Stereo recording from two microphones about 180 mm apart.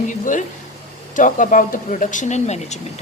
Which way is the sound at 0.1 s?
45° left (ahead or behind).